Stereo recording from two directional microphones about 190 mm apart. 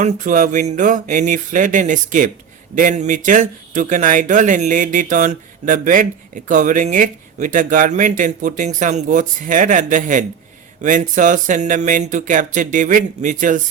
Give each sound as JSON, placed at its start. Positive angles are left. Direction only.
{"t": 0.0, "sound": "speech", "side_deg": -40}